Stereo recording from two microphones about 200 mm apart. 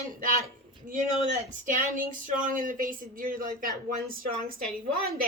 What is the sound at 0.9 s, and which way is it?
Speech, 40° right (ahead or behind).